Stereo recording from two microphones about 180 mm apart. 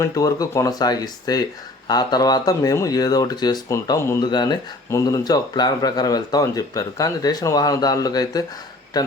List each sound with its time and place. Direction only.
0.0 s speech: 20° left (ahead or behind)